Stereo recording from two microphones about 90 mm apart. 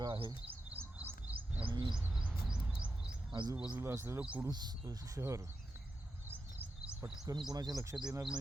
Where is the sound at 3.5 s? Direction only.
15° right (ahead or behind).